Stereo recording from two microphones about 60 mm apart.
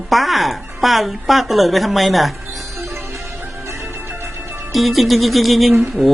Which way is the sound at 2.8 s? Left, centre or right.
Right.